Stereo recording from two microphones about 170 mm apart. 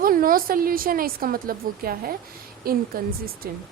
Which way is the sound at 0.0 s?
55° right (ahead or behind).